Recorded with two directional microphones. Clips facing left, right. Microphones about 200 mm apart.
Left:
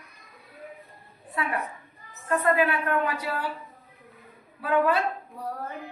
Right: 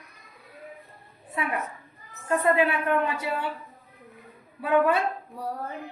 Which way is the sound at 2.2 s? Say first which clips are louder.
Right 1 dB; 25° right (ahead or behind).